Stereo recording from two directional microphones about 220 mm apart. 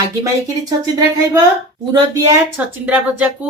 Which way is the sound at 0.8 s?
15° right (ahead or behind).